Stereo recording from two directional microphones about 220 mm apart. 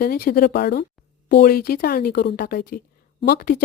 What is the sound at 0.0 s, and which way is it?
Speech, 45° left (ahead or behind).